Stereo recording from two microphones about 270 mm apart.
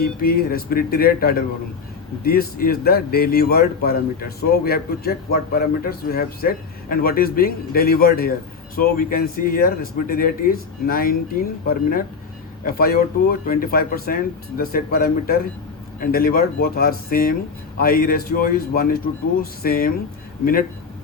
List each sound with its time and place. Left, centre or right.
0.0 s a man's voice: left